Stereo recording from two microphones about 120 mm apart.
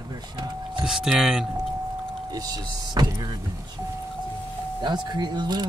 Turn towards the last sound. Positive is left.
turn(degrees=-35)  # may be behind; listen again after turning